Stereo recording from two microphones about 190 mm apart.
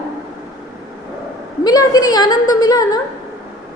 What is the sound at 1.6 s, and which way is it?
A woman's voice, 20° left (ahead or behind).